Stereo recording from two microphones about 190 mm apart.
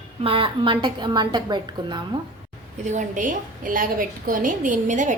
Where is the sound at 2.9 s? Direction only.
40° right (ahead or behind).